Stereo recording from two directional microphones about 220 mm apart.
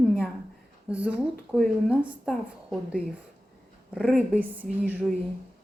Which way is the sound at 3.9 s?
Centre (ahead or behind).